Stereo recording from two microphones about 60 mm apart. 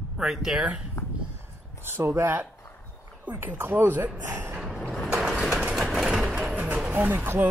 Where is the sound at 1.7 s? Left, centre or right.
Right.